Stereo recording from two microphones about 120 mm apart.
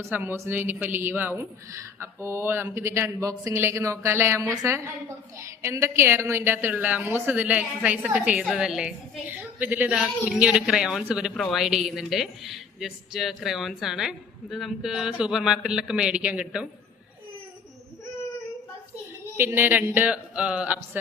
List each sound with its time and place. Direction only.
0.0 s a woman's voice: 15° right (ahead or behind)
19.4 s a woman's voice: 15° right (ahead or behind)